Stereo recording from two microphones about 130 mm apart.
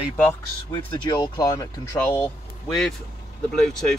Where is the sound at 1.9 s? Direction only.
15° left (ahead or behind).